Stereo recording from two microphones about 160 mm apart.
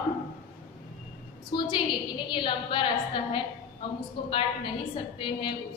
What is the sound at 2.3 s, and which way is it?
A woman's voice, 30° left (ahead or behind).